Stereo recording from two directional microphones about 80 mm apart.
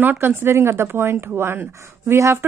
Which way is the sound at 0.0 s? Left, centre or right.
Right.